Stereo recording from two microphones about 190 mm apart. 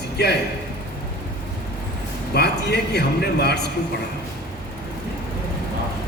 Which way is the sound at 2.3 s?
60° left (ahead or behind).